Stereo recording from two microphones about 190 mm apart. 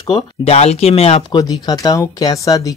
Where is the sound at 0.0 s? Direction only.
35° left (ahead or behind).